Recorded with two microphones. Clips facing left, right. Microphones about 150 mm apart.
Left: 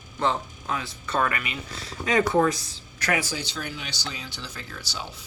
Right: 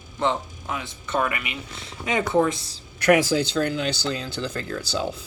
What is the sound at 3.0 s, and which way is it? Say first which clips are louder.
Speech: right 9 dB; 75° right (ahead or behind).